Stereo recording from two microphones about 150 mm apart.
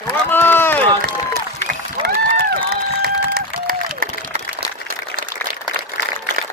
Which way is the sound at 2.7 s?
90° right.